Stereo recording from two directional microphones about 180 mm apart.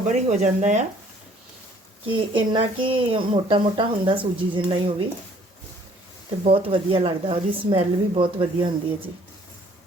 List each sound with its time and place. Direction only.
0.1 s speech: 40° right (ahead or behind)
2.0 s speech: 25° right (ahead or behind)
6.4 s speech: 30° right (ahead or behind)